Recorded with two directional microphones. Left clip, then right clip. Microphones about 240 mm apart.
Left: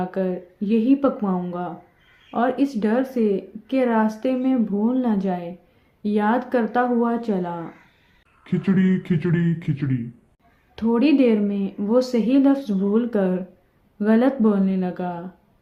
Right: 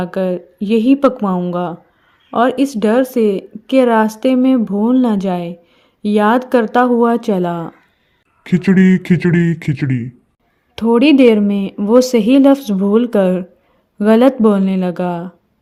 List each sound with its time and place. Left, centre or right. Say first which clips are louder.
0.0 s a woman's voice: right 7 dB; right
8.4 s speech: right 9 dB; right
10.8 s a woman's voice: right 8 dB; right